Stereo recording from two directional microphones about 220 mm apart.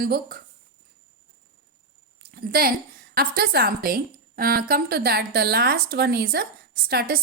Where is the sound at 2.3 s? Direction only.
45° right (ahead or behind).